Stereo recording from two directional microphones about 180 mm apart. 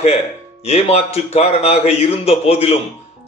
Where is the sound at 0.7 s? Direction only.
35° left (ahead or behind).